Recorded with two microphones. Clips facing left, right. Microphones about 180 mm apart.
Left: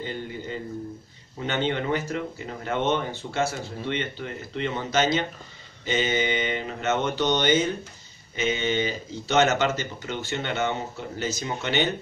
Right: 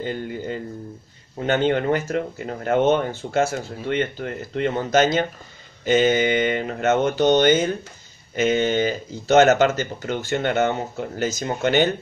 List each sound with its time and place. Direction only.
1.4 s speech: 50° right (ahead or behind)